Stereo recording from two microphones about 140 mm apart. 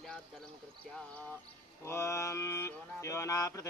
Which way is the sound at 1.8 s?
20° left (ahead or behind).